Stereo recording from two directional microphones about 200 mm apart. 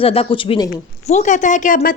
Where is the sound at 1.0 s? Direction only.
35° left (ahead or behind).